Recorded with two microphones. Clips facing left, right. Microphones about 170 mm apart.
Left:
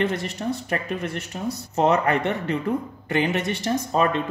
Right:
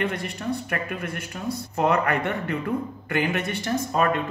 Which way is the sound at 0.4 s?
25° left (ahead or behind).